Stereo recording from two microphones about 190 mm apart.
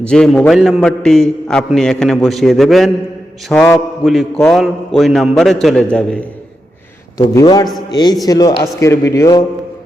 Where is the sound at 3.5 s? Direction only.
10° left (ahead or behind).